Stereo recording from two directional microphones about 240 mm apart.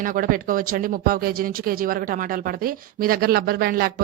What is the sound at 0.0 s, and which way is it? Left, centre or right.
Speech, right.